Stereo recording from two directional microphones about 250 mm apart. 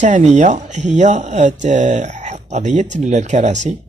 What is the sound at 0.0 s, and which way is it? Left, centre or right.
Speech, right.